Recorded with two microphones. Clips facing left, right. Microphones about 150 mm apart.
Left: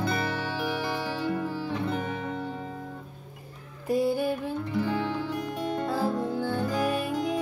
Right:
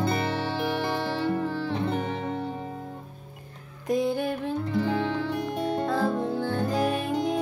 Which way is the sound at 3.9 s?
10° left (ahead or behind).